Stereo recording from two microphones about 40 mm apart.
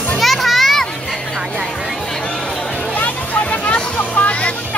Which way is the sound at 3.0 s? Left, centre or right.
Left.